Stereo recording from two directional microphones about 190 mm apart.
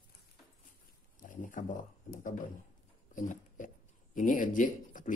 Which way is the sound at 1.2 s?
45° left (ahead or behind).